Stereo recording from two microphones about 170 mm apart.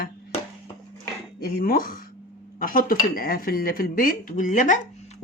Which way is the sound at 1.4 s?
60° left (ahead or behind).